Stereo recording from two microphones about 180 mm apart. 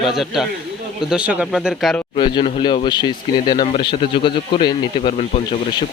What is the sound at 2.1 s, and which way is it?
Speech, 30° left (ahead or behind).